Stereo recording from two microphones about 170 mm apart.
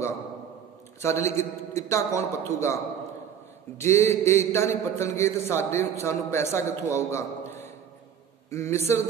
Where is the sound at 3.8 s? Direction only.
15° left (ahead or behind).